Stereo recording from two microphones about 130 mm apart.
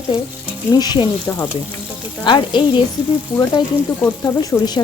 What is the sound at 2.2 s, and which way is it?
Speech, 35° left (ahead or behind).